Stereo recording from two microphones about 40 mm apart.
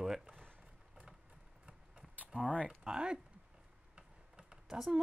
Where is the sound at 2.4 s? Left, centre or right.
Right.